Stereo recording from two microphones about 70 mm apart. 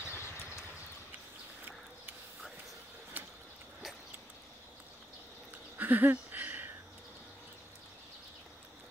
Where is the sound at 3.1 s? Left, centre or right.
Right.